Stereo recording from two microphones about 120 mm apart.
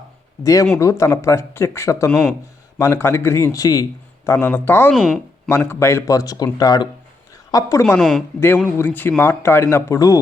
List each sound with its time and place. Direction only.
0.4 s speech: 25° left (ahead or behind)
2.0 s speech: 5° left (ahead or behind)
2.7 s speech: 25° left (ahead or behind)
4.3 s speech: 15° left (ahead or behind)
4.9 s speech: centre (ahead or behind)
5.5 s speech: 20° left (ahead or behind)
7.9 s speech: centre (ahead or behind)
8.4 s speech: 15° left (ahead or behind)